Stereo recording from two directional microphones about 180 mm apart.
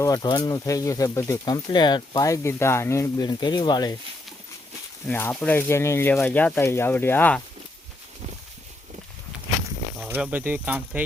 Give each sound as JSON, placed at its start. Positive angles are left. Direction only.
{"t": 0.0, "sound": "speech", "side_deg": 20}
{"t": 5.0, "sound": "speech", "side_deg": 10}
{"t": 10.0, "sound": "speech", "side_deg": -10}